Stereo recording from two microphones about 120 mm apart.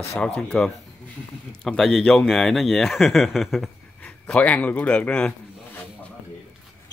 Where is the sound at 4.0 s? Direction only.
10° left (ahead or behind).